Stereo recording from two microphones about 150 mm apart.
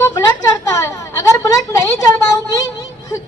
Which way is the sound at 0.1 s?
25° left (ahead or behind).